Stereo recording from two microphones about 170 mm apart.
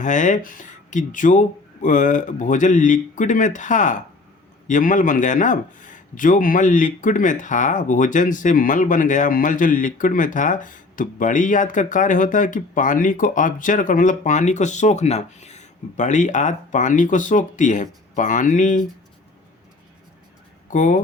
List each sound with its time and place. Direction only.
0.0 s speech: 50° left (ahead or behind)
20.7 s speech: 50° left (ahead or behind)